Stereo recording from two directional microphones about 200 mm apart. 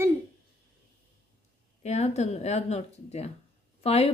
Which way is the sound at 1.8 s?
35° left (ahead or behind).